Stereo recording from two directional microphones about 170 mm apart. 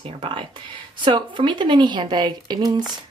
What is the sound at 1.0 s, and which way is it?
Speech, 30° right (ahead or behind).